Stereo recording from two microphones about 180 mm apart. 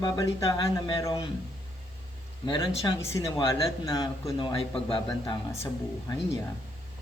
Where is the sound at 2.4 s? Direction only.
25° left (ahead or behind).